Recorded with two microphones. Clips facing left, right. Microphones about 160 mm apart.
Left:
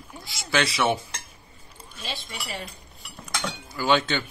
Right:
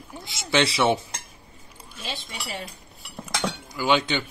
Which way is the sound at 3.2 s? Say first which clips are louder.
Right 3 dB; 15° right (ahead or behind).